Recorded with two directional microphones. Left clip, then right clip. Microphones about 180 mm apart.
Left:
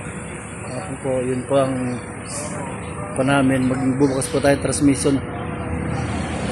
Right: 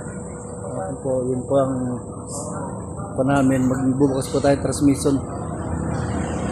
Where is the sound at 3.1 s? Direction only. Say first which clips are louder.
Left 1 dB; centre (ahead or behind).